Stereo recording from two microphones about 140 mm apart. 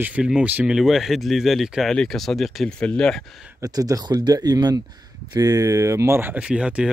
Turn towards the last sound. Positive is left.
turn(degrees=-5)  # may be behind; listen again after turning